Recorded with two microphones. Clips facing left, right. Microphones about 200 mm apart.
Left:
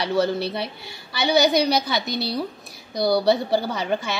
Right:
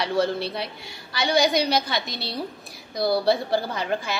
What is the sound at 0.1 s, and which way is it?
A woman's voice, 5° left (ahead or behind).